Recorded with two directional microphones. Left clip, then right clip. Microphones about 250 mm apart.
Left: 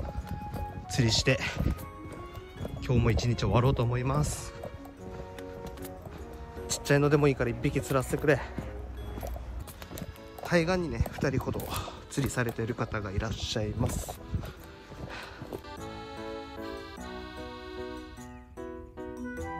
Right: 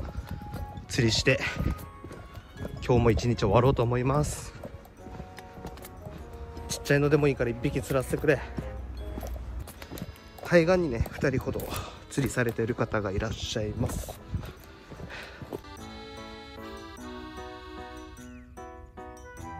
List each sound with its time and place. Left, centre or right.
0.0 s clip-clop: centre
2.8 s speech: centre
6.7 s speech: left
9.9 s speech: centre
13.3 s speech: centre
15.9 s music: centre